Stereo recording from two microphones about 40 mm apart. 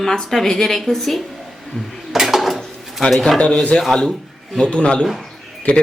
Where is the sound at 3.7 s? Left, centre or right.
Left.